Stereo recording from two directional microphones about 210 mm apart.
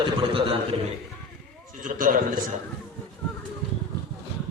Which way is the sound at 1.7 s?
40° right (ahead or behind).